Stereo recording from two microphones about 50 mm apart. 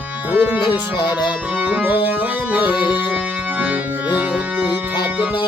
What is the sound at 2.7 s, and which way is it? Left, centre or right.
Music, right.